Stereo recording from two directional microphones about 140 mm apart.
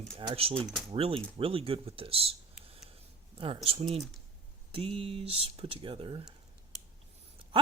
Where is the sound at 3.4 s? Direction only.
40° right (ahead or behind).